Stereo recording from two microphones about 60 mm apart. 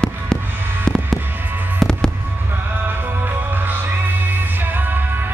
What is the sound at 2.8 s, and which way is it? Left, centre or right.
Music, right.